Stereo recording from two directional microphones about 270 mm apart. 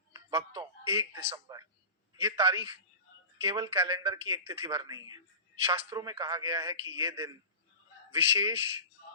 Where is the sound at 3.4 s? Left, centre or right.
Centre.